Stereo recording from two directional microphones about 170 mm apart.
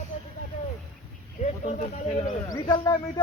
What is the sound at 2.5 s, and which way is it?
Speech, 25° left (ahead or behind).